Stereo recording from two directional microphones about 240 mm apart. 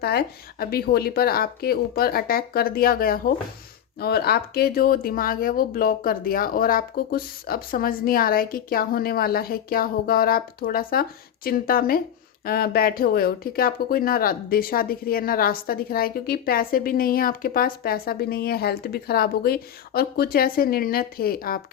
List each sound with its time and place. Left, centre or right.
0.0 s speech: left